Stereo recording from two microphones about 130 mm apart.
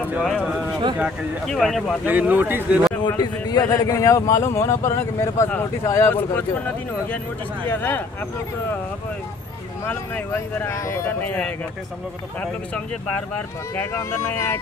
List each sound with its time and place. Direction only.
0.1 s speech: 5° right (ahead or behind)
2.0 s speech: 15° right (ahead or behind)
3.0 s a man's voice: 30° left (ahead or behind)
7.6 s speech: 15° left (ahead or behind)
9.8 s speech: 15° left (ahead or behind)
13.7 s a man's voice: 20° left (ahead or behind)